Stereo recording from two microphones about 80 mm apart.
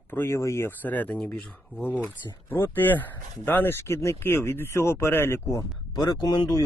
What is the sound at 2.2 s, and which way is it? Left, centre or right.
Speech, left.